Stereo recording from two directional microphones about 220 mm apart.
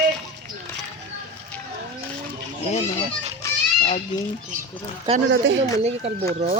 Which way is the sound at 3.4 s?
15° left (ahead or behind).